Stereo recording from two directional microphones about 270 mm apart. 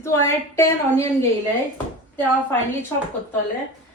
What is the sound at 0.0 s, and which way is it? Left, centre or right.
A woman's voice, centre.